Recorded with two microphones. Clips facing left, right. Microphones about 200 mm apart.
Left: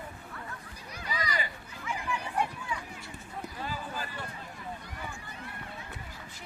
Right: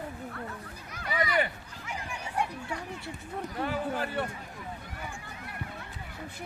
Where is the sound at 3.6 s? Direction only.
65° right (ahead or behind).